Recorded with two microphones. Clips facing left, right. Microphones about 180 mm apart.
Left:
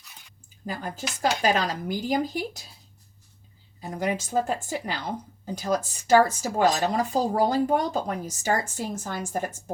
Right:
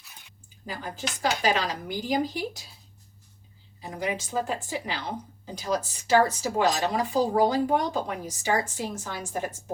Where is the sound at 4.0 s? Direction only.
50° left (ahead or behind).